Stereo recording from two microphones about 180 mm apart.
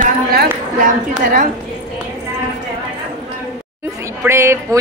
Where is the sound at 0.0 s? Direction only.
60° right (ahead or behind).